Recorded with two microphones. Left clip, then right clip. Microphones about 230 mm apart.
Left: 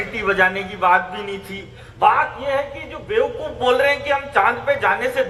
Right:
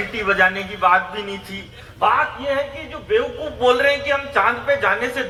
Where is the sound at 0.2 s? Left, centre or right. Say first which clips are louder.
Even; left.